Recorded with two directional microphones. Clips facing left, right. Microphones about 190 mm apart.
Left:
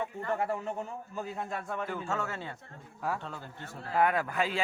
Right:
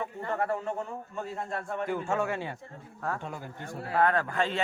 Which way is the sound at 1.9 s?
15° right (ahead or behind).